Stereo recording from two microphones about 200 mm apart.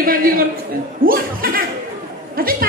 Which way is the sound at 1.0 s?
45° right (ahead or behind).